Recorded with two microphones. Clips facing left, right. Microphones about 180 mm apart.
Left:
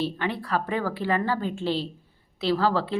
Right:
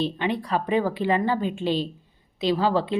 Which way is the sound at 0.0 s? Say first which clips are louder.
Right 3 dB; 20° right (ahead or behind).